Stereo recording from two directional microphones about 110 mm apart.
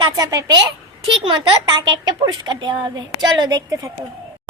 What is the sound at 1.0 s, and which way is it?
A woman's voice, 45° right (ahead or behind).